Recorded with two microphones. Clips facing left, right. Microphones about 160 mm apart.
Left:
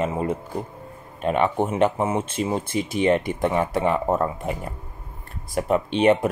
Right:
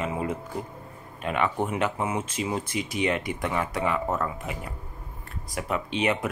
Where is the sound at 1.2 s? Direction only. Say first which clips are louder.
Left 5 dB; 35° left (ahead or behind).